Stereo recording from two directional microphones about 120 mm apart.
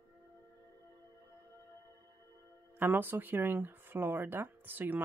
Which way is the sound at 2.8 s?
15° right (ahead or behind).